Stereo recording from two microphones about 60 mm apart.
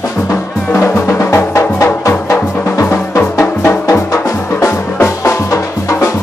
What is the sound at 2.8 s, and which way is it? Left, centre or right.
Drum, left.